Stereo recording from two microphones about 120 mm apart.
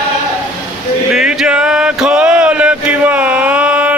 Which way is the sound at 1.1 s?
5° right (ahead or behind).